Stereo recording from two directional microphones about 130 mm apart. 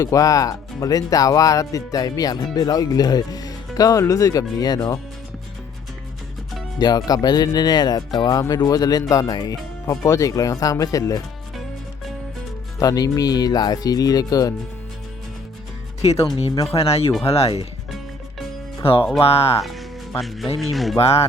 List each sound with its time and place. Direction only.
0.0 s speech: 25° left (ahead or behind)
6.7 s speech: 30° left (ahead or behind)
12.8 s speech: 30° left (ahead or behind)
16.0 s speech: 55° left (ahead or behind)
18.8 s speech: 45° left (ahead or behind)
19.6 s speech: centre (ahead or behind)
21.0 s speech: 50° left (ahead or behind)